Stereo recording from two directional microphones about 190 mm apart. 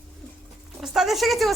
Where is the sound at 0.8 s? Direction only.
Centre (ahead or behind).